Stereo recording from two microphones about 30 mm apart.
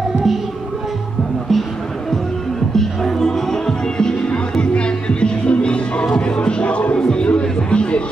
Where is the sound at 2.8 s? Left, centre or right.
Centre.